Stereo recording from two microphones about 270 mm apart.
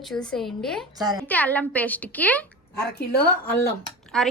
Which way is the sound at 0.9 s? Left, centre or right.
Centre.